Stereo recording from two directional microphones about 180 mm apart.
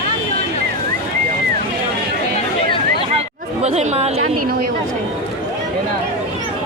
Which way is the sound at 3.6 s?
35° right (ahead or behind).